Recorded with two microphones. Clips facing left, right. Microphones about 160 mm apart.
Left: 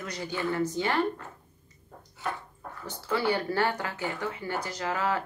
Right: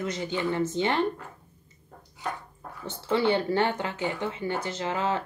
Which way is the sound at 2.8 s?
25° right (ahead or behind).